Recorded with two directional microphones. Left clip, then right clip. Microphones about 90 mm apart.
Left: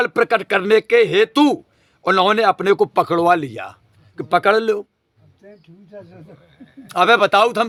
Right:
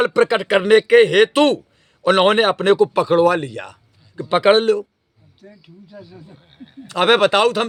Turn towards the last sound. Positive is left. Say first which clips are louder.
# left 1 dB
turn(degrees=40)  # may be behind; listen again after turning